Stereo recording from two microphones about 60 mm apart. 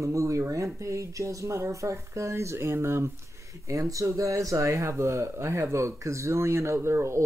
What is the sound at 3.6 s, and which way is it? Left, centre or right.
Speech, right.